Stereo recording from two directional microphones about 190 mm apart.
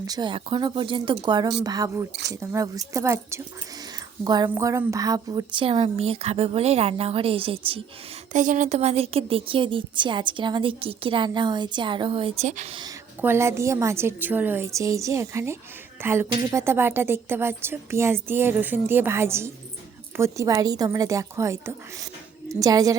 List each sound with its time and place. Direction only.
0.0 s a woman's voice: 20° right (ahead or behind)
8.3 s a woman's voice: 40° right (ahead or behind)
13.2 s a woman's voice: 15° right (ahead or behind)